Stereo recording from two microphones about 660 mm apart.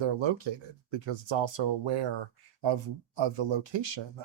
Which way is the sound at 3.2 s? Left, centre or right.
Right.